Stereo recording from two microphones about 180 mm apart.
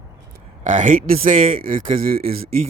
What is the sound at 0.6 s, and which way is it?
Speech, 45° right (ahead or behind).